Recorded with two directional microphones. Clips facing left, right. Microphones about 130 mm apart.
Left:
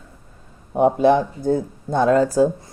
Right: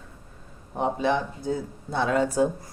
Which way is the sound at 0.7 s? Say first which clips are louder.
Left 9 dB; 50° left (ahead or behind).